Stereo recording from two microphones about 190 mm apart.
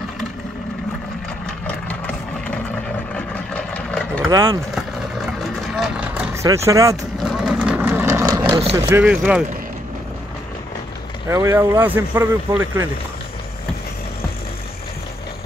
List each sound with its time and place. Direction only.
3.2 s vehicle: 5° left (ahead or behind)
4.3 s speech: 20° right (ahead or behind)
5.8 s vehicle: 5° right (ahead or behind)
7.2 s vehicle: 5° right (ahead or behind)
8.7 s speech: 15° right (ahead or behind)
11.2 s speech: 15° right (ahead or behind)